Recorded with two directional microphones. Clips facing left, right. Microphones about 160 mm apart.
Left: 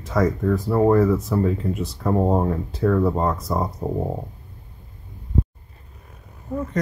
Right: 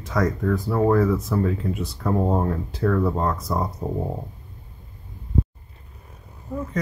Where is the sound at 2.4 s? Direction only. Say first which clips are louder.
Left 2 dB; 5° left (ahead or behind).